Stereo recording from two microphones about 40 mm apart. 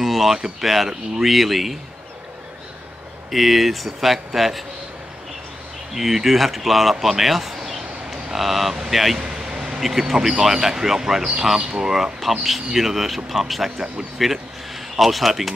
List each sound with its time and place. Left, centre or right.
0.0 s a sound: centre
0.4 s speech: centre
3.3 s speech: centre
5.9 s speech: centre
9.2 s vehicle: right
9.8 s speech: centre
13.7 s speech: centre
14.1 s speech: centre